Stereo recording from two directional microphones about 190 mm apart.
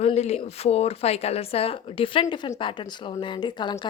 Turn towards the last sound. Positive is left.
turn(degrees=25)  # may be behind; listen again after turning